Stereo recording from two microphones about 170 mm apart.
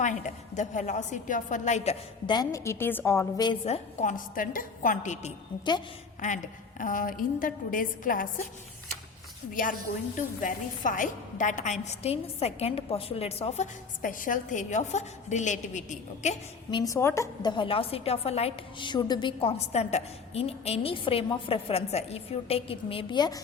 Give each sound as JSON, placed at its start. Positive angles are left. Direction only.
{"t": 0.0, "sound": "a woman's voice", "side_deg": 45}
{"t": 2.3, "sound": "a woman's voice", "side_deg": 20}
{"t": 10.4, "sound": "a woman's voice", "side_deg": 50}
{"t": 16.7, "sound": "a woman's voice", "side_deg": 20}